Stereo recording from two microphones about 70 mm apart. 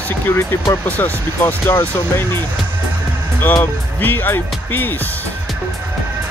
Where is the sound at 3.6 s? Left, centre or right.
Left.